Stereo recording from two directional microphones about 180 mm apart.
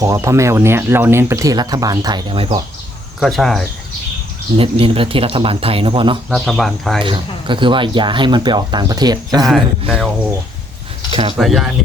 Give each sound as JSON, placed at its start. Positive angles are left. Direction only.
{"t": 0.0, "sound": "speech", "side_deg": -15}
{"t": 3.2, "sound": "speech", "side_deg": 0}
{"t": 4.5, "sound": "speech", "side_deg": -30}
{"t": 6.3, "sound": "speech", "side_deg": 0}
{"t": 7.0, "sound": "speech", "side_deg": -25}
{"t": 9.5, "sound": "speech", "side_deg": 0}
{"t": 11.1, "sound": "speech", "side_deg": -30}
{"t": 11.3, "sound": "speech", "side_deg": 0}